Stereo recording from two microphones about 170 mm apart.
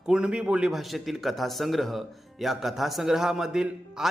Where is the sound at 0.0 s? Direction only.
5° right (ahead or behind).